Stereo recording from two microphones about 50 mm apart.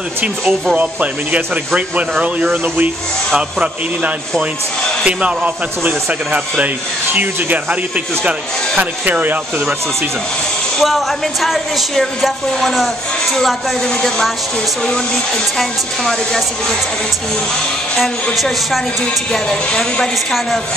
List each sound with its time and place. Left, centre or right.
2.0 s speech: right
3.3 s a man's voice: centre
5.2 s speech: right
7.2 s speech: right
9.0 s speech: right
10.8 s a woman's voice: centre
15.5 s speech: centre
17.9 s a woman's voice: centre
19.3 s speech: centre